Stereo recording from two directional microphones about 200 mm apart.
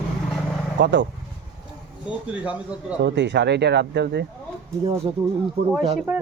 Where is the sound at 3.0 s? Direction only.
60° right (ahead or behind).